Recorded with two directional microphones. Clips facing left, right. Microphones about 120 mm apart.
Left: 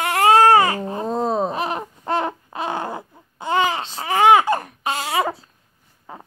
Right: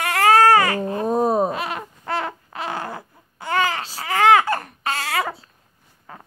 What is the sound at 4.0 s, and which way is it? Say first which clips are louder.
Baby cry: left 1 dB; 20° left (ahead or behind).